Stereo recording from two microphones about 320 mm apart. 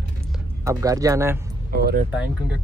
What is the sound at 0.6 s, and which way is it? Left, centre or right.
Speech, centre.